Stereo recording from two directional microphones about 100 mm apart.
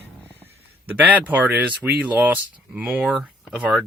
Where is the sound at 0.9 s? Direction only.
15° right (ahead or behind).